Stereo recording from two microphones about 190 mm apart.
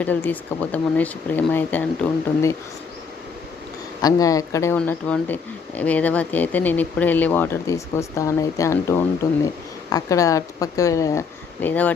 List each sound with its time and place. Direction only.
0.0 s speech: 10° left (ahead or behind)
4.0 s speech: 20° left (ahead or behind)